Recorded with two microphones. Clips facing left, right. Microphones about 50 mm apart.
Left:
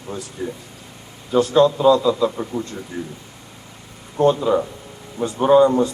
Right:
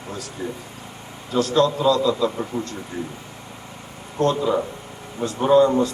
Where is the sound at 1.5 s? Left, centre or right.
Centre.